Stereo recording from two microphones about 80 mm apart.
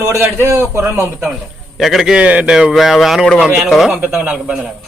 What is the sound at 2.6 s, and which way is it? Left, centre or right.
Speech, centre.